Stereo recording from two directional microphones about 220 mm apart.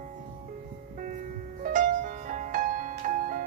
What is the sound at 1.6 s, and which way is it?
Music, 35° right (ahead or behind).